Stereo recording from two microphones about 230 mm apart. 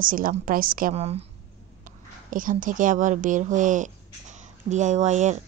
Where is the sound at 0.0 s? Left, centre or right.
Right.